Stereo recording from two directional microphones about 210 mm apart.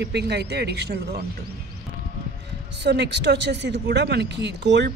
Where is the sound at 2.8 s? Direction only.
55° right (ahead or behind).